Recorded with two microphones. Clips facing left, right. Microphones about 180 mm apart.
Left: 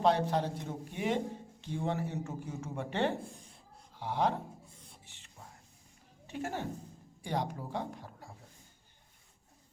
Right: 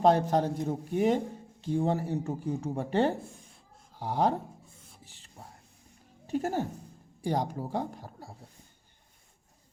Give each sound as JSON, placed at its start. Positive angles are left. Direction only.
{"t": 0.0, "sound": "a man's voice", "side_deg": -45}
{"t": 5.0, "sound": "whispering", "side_deg": -35}
{"t": 6.2, "sound": "a woman's voice", "side_deg": -40}